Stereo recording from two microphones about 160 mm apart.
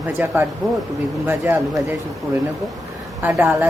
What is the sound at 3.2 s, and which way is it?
Speech, 10° right (ahead or behind).